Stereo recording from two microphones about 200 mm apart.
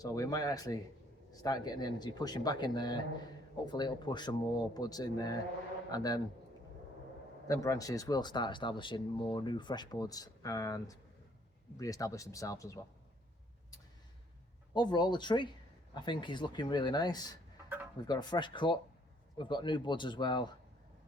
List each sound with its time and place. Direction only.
0.0 s speech: 15° left (ahead or behind)
7.4 s speech: 15° left (ahead or behind)
14.7 s speech: 20° left (ahead or behind)